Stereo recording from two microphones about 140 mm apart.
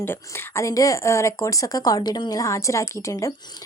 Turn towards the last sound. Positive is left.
turn(degrees=25)  # may be behind; listen again after turning